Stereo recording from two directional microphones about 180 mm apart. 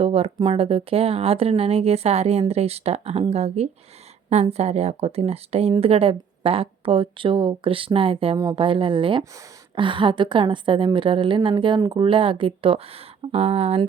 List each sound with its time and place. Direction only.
0.0 s a woman's voice: 35° right (ahead or behind)